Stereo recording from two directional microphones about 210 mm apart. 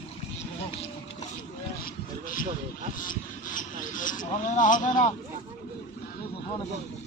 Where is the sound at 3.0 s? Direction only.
40° left (ahead or behind).